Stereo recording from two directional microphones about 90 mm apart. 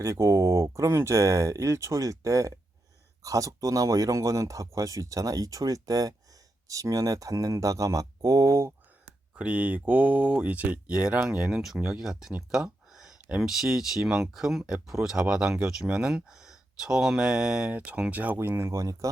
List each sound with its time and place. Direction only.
0.0 s speech: 35° right (ahead or behind)
9.3 s speech: 15° right (ahead or behind); by 19.1 s 40° right (ahead or behind)